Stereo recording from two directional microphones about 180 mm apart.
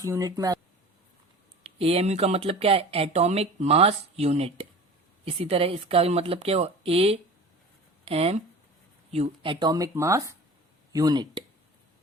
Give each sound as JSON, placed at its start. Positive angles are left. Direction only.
{"t": 0.0, "sound": "speech", "side_deg": -15}
{"t": 1.6, "sound": "speech", "side_deg": -35}